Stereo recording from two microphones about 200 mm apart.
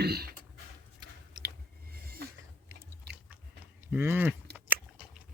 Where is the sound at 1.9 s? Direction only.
50° right (ahead or behind).